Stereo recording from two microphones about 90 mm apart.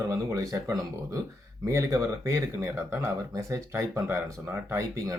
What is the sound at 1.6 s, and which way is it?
Speech, 35° right (ahead or behind).